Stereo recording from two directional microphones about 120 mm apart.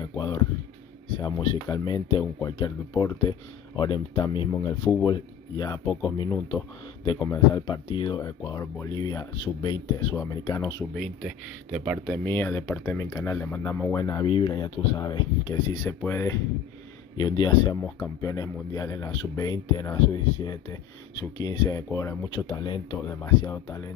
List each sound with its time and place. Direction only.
0.1 s a sound: 35° left (ahead or behind)
1.2 s speech: 35° left (ahead or behind)
8.2 s speech: 30° left (ahead or behind)
11.2 s speech: 10° right (ahead or behind)
12.3 s speech: 20° left (ahead or behind)
14.2 s speech: 45° left (ahead or behind)
16.0 s speech: 20° left (ahead or behind)
17.2 s speech: 40° left (ahead or behind)